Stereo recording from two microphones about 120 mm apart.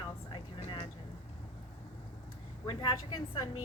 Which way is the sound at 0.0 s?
40° left (ahead or behind).